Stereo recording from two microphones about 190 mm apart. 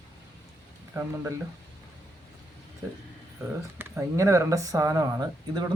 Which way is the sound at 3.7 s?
15° right (ahead or behind).